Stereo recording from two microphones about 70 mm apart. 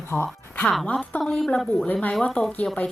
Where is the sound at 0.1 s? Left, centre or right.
Left.